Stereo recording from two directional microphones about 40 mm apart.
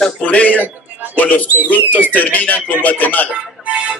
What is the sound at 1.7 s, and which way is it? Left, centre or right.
Music, left.